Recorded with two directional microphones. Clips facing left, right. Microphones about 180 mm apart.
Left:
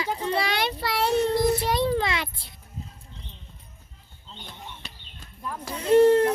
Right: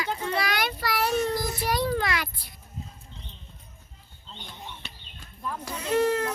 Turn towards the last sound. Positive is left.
turn(degrees=30)  # may be behind; listen again after turning